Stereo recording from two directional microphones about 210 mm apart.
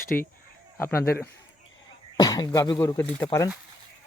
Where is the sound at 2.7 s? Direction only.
10° left (ahead or behind).